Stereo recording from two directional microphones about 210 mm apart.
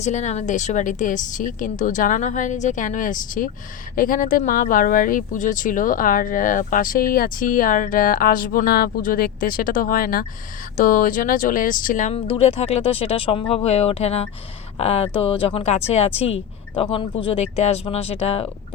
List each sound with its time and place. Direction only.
0.0 s a woman's voice: 35° left (ahead or behind)